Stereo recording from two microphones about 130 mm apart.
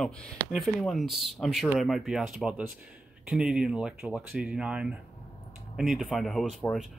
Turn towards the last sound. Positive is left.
turn(degrees=0)  # may be behind; listen again after turning